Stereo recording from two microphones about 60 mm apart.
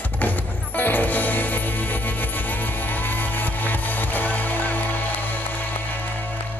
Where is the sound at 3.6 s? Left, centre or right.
Left.